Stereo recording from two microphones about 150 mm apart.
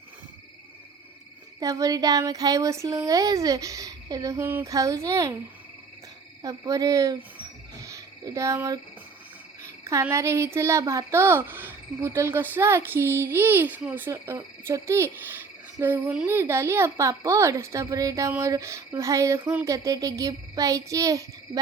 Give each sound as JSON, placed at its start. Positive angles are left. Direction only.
{"t": 1.5, "sound": "a child's voice", "side_deg": -25}
{"t": 6.4, "sound": "a child's voice", "side_deg": -25}
{"t": 7.9, "sound": "a sound", "side_deg": -20}
{"t": 9.8, "sound": "a child's voice", "side_deg": -15}